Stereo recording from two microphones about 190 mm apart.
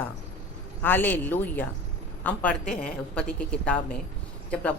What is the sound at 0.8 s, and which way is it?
A woman's voice, 10° left (ahead or behind).